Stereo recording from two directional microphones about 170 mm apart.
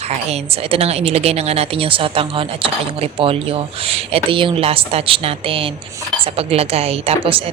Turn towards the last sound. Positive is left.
turn(degrees=-35)  # may be behind; listen again after turning